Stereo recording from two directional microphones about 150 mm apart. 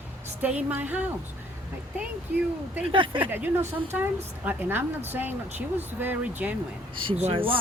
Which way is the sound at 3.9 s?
10° right (ahead or behind).